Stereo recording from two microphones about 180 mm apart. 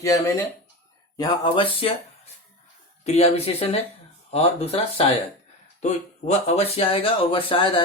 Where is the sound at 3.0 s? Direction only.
35° left (ahead or behind).